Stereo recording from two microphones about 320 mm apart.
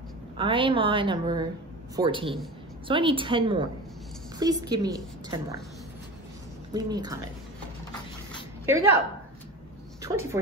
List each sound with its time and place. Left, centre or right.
0.4 s a woman's voice: centre
6.7 s a woman's voice: centre
8.6 s a woman's voice: centre
10.0 s a woman's voice: centre